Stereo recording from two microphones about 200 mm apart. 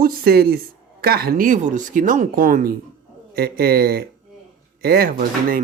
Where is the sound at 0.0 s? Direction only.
50° right (ahead or behind).